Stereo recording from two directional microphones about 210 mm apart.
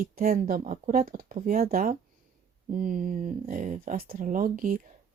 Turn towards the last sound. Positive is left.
turn(degrees=-40)  # may be behind; listen again after turning